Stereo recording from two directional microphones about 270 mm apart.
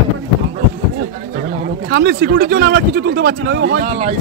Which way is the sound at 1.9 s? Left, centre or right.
Right.